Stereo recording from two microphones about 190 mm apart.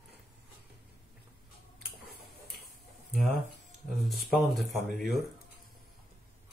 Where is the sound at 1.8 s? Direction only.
55° right (ahead or behind).